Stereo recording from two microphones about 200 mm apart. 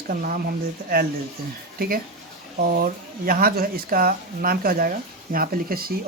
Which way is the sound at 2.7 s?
45° right (ahead or behind).